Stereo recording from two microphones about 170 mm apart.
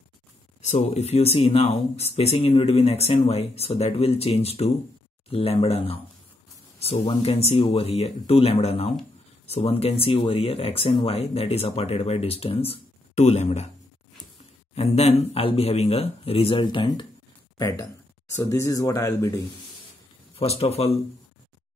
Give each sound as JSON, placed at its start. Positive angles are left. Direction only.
{"t": 0.6, "sound": "speech", "side_deg": 40}
{"t": 20.3, "sound": "speech", "side_deg": 35}